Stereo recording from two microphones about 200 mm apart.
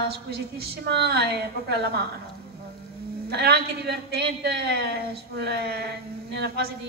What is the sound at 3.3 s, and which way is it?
A man's voice, 55° right (ahead or behind).